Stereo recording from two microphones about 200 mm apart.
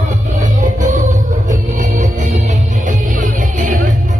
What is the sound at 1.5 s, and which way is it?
Music, 40° right (ahead or behind).